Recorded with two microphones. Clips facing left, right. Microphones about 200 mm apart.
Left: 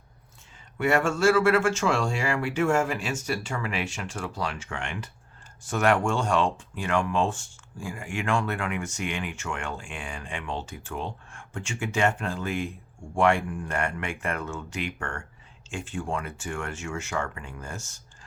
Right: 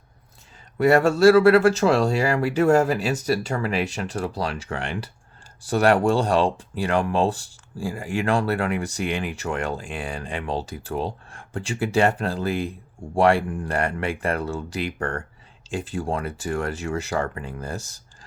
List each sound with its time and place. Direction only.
0.8 s speech: 35° right (ahead or behind)